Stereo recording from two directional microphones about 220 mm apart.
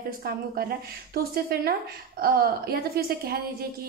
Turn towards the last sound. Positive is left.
turn(degrees=-45)  # may be behind; listen again after turning